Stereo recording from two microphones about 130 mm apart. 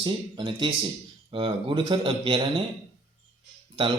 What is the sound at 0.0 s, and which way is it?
A man's voice, 35° right (ahead or behind).